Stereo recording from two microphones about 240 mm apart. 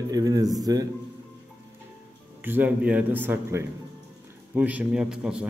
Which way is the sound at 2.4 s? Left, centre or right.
Centre.